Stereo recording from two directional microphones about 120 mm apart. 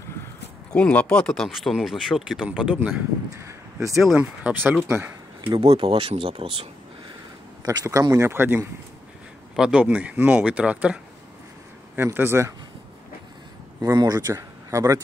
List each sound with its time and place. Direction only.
0.7 s speech: 10° left (ahead or behind); by 3.0 s 10° right (ahead or behind)
3.3 s speech: 25° right (ahead or behind)
4.1 s speech: 10° right (ahead or behind)
5.8 s speech: 45° right (ahead or behind)
7.6 s speech: 25° right (ahead or behind)
9.6 s speech: 10° right (ahead or behind)
13.7 s speech: 35° right (ahead or behind)